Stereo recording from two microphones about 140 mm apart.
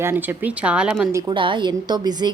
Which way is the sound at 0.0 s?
15° right (ahead or behind).